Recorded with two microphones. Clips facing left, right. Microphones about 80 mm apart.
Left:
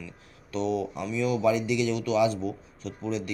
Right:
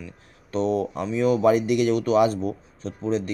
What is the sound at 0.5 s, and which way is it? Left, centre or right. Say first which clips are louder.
Speech: right 5 dB; right.